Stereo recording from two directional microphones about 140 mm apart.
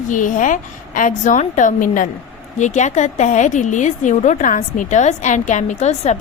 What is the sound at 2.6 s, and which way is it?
A woman's voice, 60° left (ahead or behind).